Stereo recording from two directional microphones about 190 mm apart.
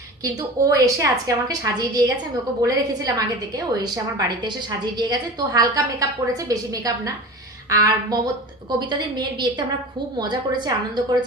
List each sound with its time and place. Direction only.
0.2 s a woman's voice: 20° right (ahead or behind)